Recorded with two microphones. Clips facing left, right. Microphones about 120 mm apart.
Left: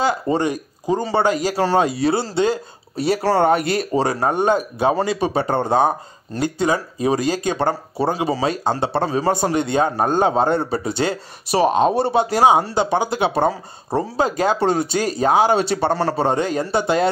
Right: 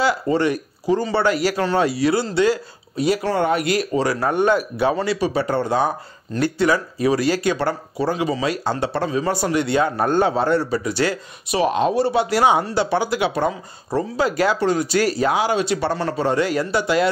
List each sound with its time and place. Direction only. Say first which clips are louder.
0.0 s a man's voice: even; 20° left (ahead or behind)
5.5 s speech: left 4 dB; 50° left (ahead or behind)
6.4 s speech: right 1 dB; 20° left (ahead or behind)
8.1 s speech: even; 35° left (ahead or behind)
10.0 s a man's voice: left 1 dB; 15° left (ahead or behind)
11.5 s speech: left 2 dB; 35° left (ahead or behind)